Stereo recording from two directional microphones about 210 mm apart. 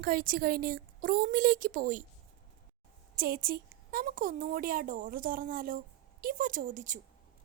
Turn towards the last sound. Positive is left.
turn(degrees=-40)  # may be behind; listen again after turning